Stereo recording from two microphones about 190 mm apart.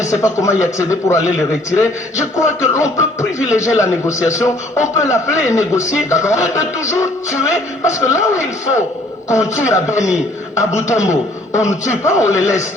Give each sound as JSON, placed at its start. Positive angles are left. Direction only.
{"t": 0.0, "sound": "a man's voice", "side_deg": 15}